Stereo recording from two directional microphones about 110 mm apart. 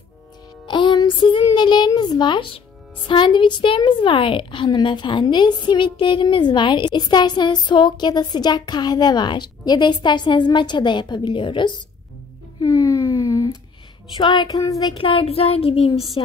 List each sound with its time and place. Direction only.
0.7 s music: 45° left (ahead or behind)
1.5 s a woman's voice: 40° left (ahead or behind)
12.6 s a sound: 30° left (ahead or behind)
14.1 s a woman's voice: 45° left (ahead or behind)
15.0 s child singing: 55° left (ahead or behind)